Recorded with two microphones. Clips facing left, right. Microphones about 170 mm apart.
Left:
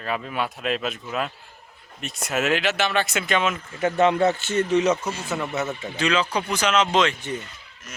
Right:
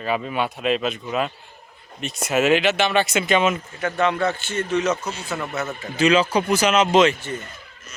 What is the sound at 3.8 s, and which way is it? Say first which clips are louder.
A man's voice: left 3 dB; 25° left (ahead or behind).